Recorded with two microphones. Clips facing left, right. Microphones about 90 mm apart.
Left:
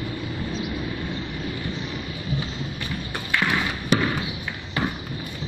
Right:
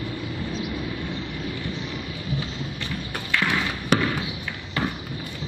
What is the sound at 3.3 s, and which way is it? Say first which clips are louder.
Basketball bounce: left 1 dB; 15° left (ahead or behind).